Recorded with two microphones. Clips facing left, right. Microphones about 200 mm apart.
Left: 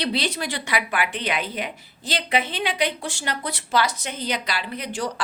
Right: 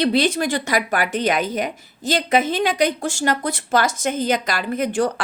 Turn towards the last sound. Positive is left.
turn(degrees=-50)  # may be behind; listen again after turning